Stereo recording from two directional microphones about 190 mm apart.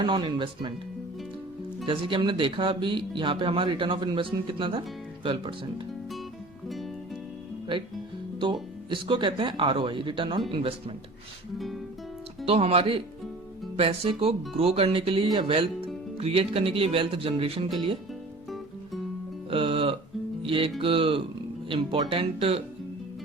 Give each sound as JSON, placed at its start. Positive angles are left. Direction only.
{"t": 0.0, "sound": "speech", "side_deg": -25}
{"t": 1.9, "sound": "speech", "side_deg": -25}
{"t": 8.9, "sound": "speech", "side_deg": -25}
{"t": 12.5, "sound": "speech", "side_deg": -30}
{"t": 19.5, "sound": "music", "side_deg": -30}
{"t": 20.4, "sound": "speech", "side_deg": -30}